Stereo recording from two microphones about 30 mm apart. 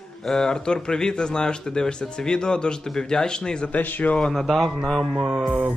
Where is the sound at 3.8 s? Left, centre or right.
Left.